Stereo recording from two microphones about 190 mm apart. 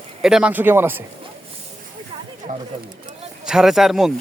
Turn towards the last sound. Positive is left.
turn(degrees=0)  # may be behind; listen again after turning